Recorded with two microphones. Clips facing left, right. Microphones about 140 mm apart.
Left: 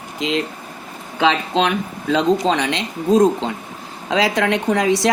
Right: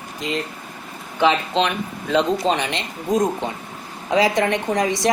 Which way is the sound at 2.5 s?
90° left.